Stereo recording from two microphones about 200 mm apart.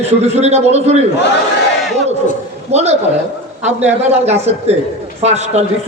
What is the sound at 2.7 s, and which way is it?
Speech, 35° right (ahead or behind).